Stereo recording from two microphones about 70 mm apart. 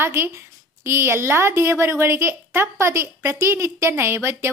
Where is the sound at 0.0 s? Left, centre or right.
Right.